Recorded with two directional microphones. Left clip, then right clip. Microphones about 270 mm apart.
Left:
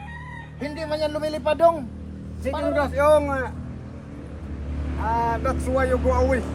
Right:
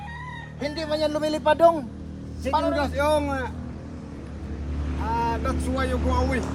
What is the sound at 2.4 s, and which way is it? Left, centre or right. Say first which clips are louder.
A man's voice: even; centre.